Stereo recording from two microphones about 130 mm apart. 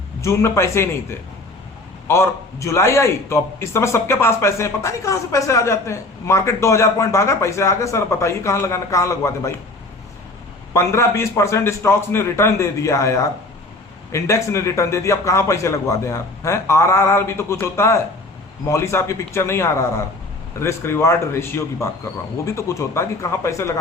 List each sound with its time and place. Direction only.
0.2 s a man's voice: 20° left (ahead or behind)
10.8 s a man's voice: 20° left (ahead or behind)